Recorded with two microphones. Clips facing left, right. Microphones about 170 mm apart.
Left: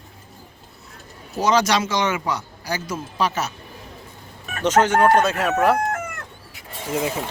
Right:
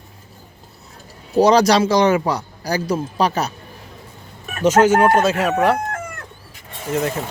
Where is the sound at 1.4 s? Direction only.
35° right (ahead or behind).